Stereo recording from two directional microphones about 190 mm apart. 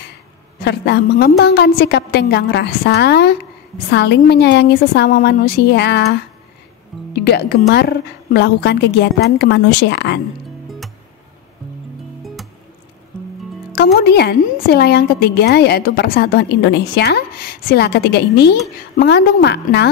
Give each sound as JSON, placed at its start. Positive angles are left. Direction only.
{"t": 0.6, "sound": "a man's voice", "side_deg": 60}
{"t": 7.2, "sound": "a woman's voice", "side_deg": 55}
{"t": 13.9, "sound": "a woman's voice", "side_deg": 55}